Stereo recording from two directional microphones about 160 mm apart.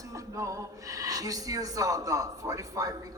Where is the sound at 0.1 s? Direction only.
20° right (ahead or behind).